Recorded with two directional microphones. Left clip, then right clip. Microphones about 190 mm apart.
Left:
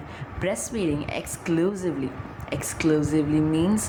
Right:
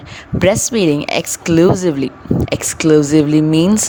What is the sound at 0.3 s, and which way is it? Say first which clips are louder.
Speech: right 14 dB; 50° right (ahead or behind).